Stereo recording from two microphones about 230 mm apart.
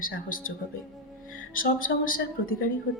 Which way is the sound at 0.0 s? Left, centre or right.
Left.